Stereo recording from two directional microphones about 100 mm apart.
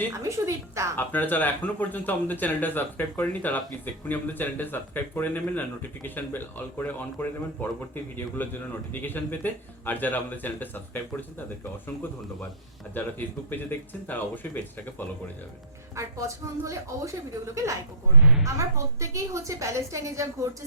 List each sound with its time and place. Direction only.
0.1 s a woman's voice: 30° right (ahead or behind)
0.9 s speech: 20° left (ahead or behind)
12.9 s speech: 20° left (ahead or behind)
16.0 s a woman's voice: 30° right (ahead or behind)
18.2 s a woman's voice: 5° right (ahead or behind)
18.4 s a woman's voice: 30° right (ahead or behind)